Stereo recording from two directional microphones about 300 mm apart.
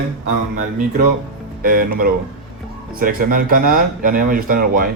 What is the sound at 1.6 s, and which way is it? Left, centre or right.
Speech, right.